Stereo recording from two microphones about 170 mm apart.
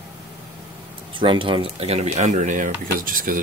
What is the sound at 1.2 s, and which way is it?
Speech, 30° right (ahead or behind).